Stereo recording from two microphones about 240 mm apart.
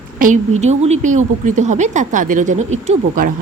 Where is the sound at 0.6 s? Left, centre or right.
Right.